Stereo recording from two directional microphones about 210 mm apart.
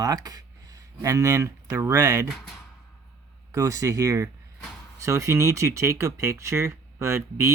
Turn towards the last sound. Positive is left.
turn(degrees=-15)  # may be behind; listen again after turning